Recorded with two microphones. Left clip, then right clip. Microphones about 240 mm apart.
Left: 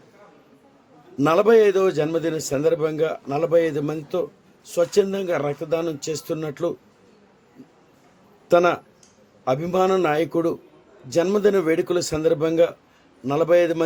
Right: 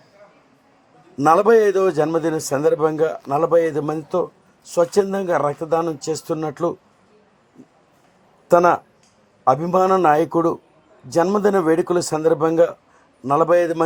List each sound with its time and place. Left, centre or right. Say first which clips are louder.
1.1 s a man's voice: right 2 dB; centre
8.4 s a man's voice: right 3 dB; centre